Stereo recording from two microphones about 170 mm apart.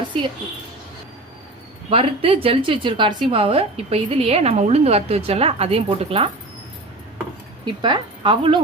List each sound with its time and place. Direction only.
0.1 s a woman's voice: 30° right (ahead or behind)
1.9 s a woman's voice: 35° right (ahead or behind)
7.6 s speech: 30° right (ahead or behind)